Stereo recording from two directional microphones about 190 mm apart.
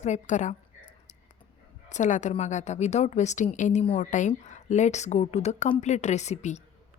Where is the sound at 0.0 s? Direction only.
40° left (ahead or behind).